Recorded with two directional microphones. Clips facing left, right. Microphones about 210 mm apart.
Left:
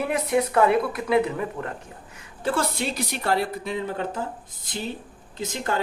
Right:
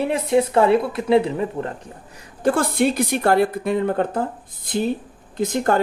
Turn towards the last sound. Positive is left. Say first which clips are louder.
# right 8 dB
turn(degrees=-50)  # may be behind; listen again after turning